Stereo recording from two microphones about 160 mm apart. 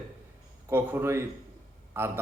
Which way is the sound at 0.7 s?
15° right (ahead or behind).